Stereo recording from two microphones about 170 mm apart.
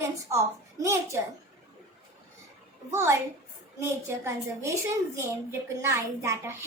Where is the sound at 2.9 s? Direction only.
15° right (ahead or behind).